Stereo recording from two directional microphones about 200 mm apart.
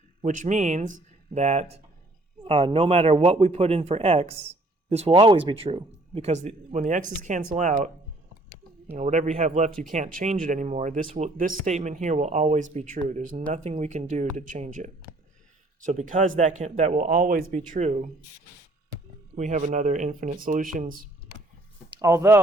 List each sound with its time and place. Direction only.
0.3 s a man's voice: 40° right (ahead or behind)
9.0 s speech: 35° right (ahead or behind)
19.4 s speech: 35° right (ahead or behind)
21.9 s speech: 15° right (ahead or behind)